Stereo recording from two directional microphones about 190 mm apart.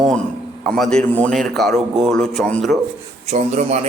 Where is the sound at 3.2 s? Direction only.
35° right (ahead or behind).